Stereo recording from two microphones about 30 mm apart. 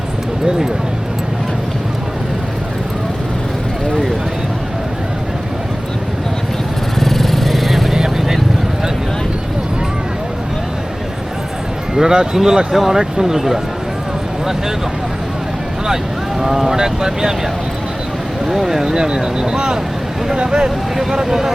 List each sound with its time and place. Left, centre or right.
7.0 s vehicle: centre
7.9 s vehicle: centre
11.9 s speech: right
12.7 s speech: centre
13.0 s speech: centre
16.4 s speech: centre
18.4 s speech: centre
20.7 s vehicle: centre
21.2 s speech: centre